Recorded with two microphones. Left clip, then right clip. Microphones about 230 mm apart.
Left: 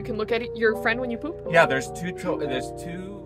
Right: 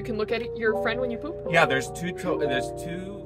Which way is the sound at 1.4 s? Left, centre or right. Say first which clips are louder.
Left 2 dB; centre.